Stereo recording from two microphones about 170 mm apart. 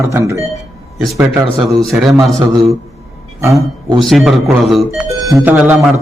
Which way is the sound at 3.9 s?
Centre (ahead or behind).